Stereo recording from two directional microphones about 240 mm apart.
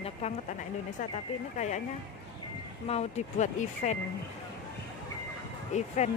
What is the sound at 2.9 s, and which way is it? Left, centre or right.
Speech, left.